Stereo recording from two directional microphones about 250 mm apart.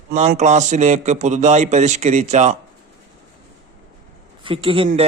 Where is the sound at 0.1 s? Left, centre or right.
Right.